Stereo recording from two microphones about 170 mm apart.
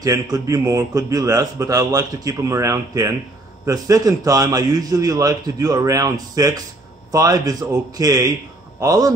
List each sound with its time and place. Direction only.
0.0 s a man's voice: 20° right (ahead or behind)